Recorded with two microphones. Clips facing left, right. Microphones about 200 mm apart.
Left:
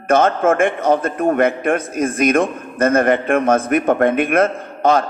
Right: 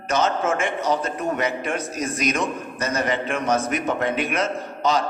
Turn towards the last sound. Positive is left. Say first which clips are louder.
# left 6 dB
turn(degrees=55)  # may be behind; listen again after turning